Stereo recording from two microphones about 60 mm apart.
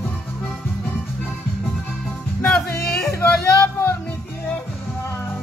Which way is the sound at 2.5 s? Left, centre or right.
Centre.